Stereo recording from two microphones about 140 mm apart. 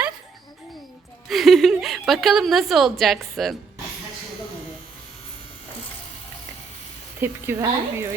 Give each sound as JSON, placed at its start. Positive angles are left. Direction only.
{"t": 1.3, "sound": "a woman's voice", "side_deg": 0}
{"t": 7.2, "sound": "a woman's voice", "side_deg": -15}